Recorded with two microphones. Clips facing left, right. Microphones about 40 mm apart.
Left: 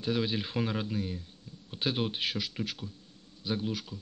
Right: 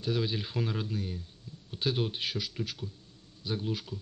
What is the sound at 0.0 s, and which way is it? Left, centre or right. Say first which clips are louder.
Speech: left 1 dB; centre.